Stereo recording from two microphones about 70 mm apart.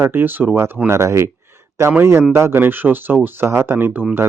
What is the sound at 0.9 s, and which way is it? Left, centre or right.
Speech, right.